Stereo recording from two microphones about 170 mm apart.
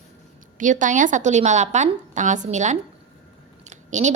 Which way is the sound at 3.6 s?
45° right (ahead or behind).